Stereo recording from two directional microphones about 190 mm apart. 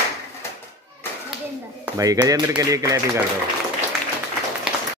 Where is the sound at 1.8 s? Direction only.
20° right (ahead or behind).